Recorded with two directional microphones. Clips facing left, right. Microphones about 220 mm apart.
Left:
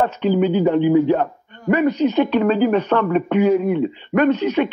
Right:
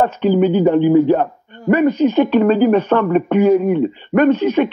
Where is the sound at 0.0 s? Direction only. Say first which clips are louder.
Right 3 dB; 45° right (ahead or behind).